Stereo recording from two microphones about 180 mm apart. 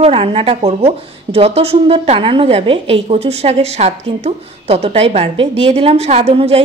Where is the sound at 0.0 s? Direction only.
30° right (ahead or behind).